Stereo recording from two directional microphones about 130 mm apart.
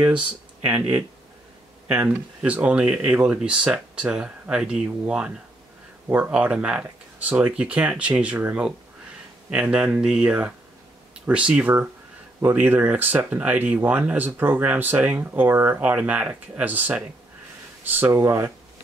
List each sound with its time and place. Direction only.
0.0 s speech: 10° right (ahead or behind)
1.9 s speech: 10° right (ahead or behind)